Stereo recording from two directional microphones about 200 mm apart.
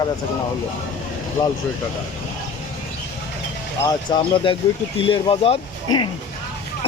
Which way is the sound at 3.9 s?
25° left (ahead or behind).